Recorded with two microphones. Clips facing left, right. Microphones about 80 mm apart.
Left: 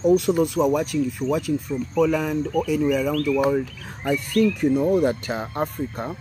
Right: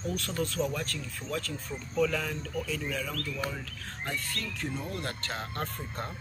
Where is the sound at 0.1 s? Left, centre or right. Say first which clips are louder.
Left 14 dB; centre.